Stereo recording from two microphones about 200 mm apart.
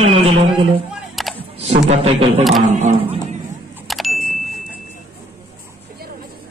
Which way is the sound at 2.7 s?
35° right (ahead or behind).